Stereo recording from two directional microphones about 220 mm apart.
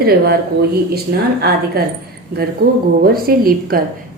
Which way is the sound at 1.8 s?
45° right (ahead or behind).